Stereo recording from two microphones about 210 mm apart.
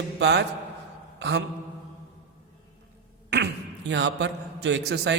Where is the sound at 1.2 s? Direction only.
55° right (ahead or behind).